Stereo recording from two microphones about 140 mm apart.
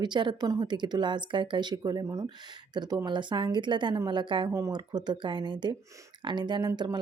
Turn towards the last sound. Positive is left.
turn(degrees=-25)  # may be behind; listen again after turning